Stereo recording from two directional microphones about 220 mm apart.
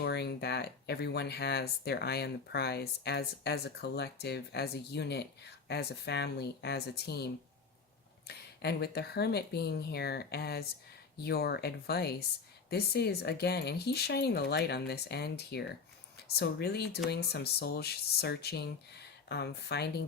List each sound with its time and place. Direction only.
0.0 s speech: 50° left (ahead or behind)
8.3 s speech: 45° left (ahead or behind)